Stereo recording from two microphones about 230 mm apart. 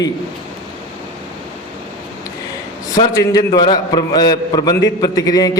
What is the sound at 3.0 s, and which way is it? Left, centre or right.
A man's voice, centre.